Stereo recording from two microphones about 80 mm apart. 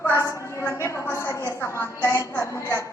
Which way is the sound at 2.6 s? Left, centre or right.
Right.